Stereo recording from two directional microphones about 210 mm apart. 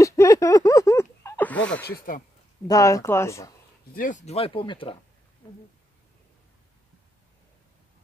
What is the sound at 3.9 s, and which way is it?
Speech, 35° left (ahead or behind).